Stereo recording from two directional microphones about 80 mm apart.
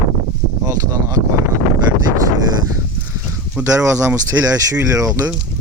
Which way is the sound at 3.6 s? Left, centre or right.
Right.